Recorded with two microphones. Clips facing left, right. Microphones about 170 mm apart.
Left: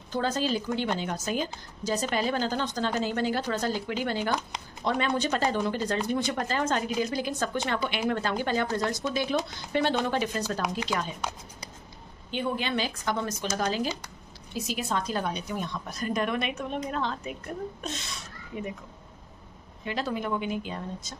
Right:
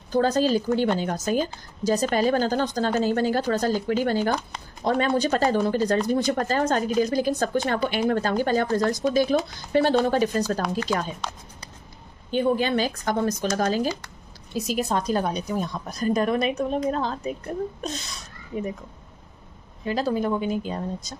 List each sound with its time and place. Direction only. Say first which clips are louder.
0.1 s a woman's voice: right 7 dB; 40° right (ahead or behind)
12.3 s a woman's voice: right 8 dB; 45° right (ahead or behind)
19.8 s a woman's voice: right 6 dB; 35° right (ahead or behind)